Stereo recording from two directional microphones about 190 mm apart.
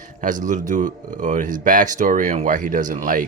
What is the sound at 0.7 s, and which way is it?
Speech, 40° right (ahead or behind).